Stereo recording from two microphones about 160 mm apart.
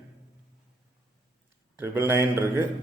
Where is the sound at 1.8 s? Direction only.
15° right (ahead or behind).